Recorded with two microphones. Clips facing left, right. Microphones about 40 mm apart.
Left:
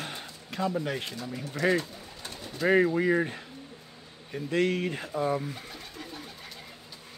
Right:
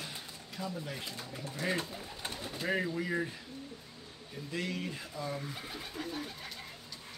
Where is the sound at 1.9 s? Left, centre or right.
Centre.